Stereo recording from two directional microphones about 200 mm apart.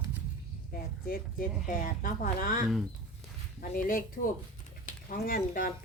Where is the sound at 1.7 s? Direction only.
45° left (ahead or behind).